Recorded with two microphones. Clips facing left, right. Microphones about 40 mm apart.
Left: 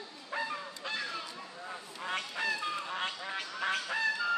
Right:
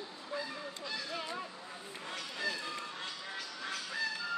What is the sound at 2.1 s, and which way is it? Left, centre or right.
Fowl, left.